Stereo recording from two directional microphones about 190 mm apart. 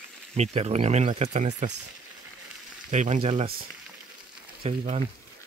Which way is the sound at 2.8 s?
40° right (ahead or behind).